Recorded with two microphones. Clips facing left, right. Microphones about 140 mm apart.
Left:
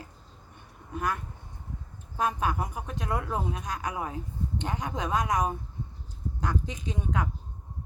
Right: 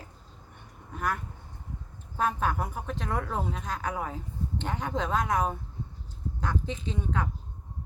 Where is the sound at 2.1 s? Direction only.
15° left (ahead or behind).